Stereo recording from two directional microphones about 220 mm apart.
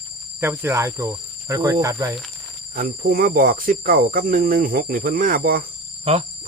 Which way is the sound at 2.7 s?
40° right (ahead or behind).